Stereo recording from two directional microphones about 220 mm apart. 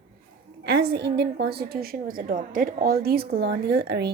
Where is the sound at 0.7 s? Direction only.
50° right (ahead or behind).